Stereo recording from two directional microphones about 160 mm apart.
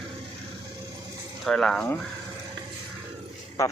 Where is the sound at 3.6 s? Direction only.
20° left (ahead or behind).